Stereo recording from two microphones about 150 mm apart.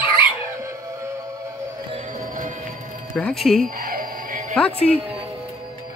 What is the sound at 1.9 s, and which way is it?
Music, 50° right (ahead or behind).